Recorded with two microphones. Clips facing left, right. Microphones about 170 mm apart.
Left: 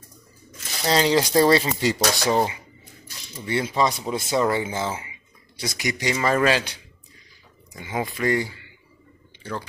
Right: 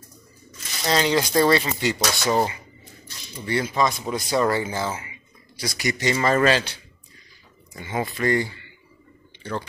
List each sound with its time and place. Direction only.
0.8 s speech: 30° left (ahead or behind)
3.4 s a man's voice: 25° left (ahead or behind); by 9.7 s 10° left (ahead or behind)